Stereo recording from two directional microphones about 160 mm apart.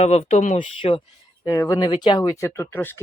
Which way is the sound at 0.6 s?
30° left (ahead or behind).